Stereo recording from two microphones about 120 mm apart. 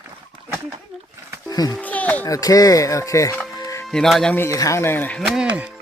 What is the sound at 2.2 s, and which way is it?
Speech, 30° left (ahead or behind).